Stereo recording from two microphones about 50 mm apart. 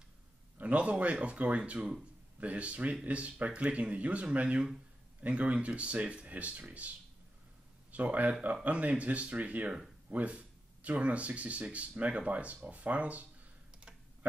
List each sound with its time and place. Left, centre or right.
0.6 s a man's voice: right
7.9 s speech: right
9.7 s a sound: centre
10.1 s speech: right